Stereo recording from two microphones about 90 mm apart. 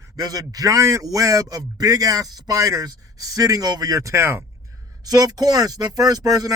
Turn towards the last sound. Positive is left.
turn(degrees=-45)  # may be behind; listen again after turning